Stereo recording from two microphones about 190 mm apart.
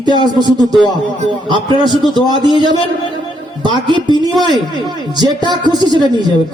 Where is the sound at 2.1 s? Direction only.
25° right (ahead or behind).